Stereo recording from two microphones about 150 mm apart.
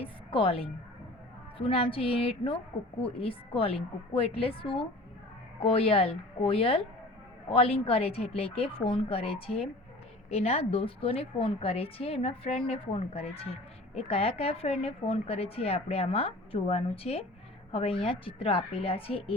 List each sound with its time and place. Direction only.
0.0 s a woman's voice: 35° left (ahead or behind)